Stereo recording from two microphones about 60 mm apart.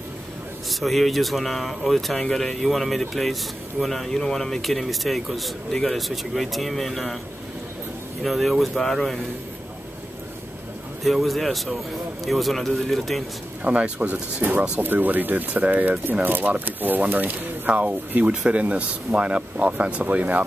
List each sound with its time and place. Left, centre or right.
0.7 s speech: centre
8.2 s speech: centre
11.1 s speech: centre
13.7 s speech: right
14.8 s speech: right